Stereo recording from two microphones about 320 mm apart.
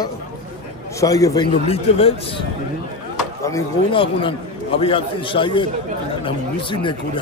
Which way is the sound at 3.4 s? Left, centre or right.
Centre.